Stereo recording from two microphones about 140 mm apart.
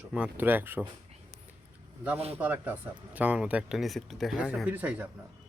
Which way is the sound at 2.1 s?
45° right (ahead or behind).